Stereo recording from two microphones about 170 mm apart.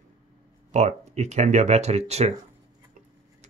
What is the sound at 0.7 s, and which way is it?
Speech, 40° right (ahead or behind).